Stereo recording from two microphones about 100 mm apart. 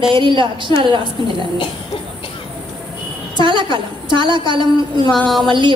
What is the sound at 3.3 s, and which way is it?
A woman's voice, 55° right (ahead or behind).